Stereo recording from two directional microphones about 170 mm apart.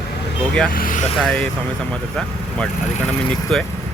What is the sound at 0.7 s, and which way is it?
Speech, 55° left (ahead or behind).